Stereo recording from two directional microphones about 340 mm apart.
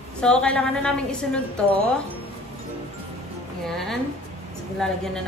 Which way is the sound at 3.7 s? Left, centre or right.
Centre.